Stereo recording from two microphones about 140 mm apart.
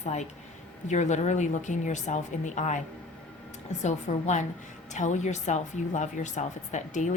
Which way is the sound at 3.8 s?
55° left (ahead or behind).